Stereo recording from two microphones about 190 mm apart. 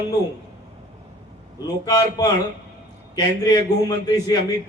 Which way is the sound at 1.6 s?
20° left (ahead or behind).